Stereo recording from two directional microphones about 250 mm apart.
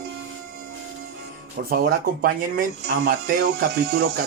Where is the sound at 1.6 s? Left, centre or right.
Right.